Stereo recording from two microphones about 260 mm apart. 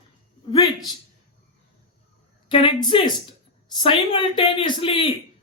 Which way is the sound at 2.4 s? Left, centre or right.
Centre.